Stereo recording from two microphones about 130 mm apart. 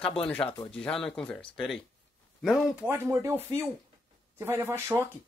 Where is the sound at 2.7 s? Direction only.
15° right (ahead or behind).